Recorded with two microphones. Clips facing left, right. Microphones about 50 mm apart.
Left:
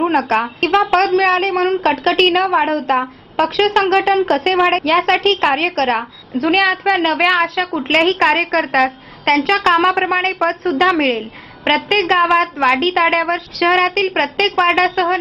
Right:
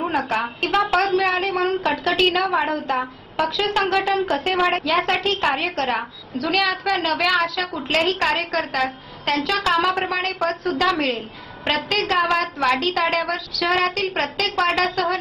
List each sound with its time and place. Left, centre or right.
0.3 s a woman's voice: left
0.7 s speech: left
1.2 s a woman's voice: left
1.6 s a woman's voice: left